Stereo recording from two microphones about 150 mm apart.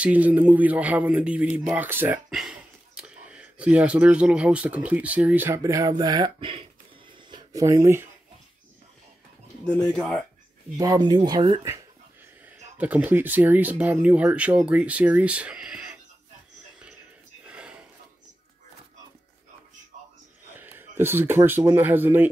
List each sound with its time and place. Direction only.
0.0 s speech: 10° right (ahead or behind)
9.7 s speech: 5° left (ahead or behind)
10.8 s speech: 25° right (ahead or behind)
12.7 s speech: 10° right (ahead or behind)
17.5 s a sound: 5° right (ahead or behind)
20.5 s speech: 15° right (ahead or behind)